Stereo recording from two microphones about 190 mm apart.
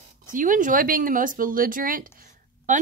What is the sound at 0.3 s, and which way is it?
A woman's voice, 45° right (ahead or behind).